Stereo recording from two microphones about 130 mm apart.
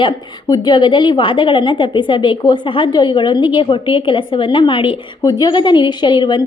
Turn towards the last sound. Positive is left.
turn(degrees=35)  # may be behind; listen again after turning